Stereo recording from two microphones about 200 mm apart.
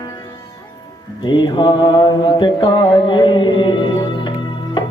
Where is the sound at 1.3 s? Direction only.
25° left (ahead or behind).